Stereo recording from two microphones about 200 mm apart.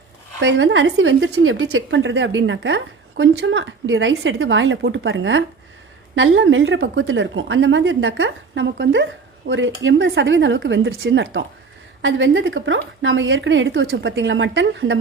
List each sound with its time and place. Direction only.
0.3 s speech: 65° right (ahead or behind)